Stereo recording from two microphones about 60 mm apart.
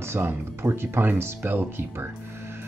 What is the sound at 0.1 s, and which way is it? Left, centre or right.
Speech, right.